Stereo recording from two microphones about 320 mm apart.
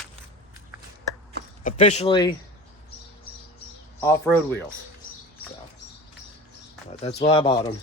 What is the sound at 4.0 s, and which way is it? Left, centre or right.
Speech, centre.